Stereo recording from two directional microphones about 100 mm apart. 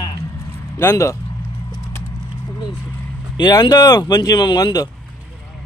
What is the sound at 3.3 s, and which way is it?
Speech, 45° left (ahead or behind).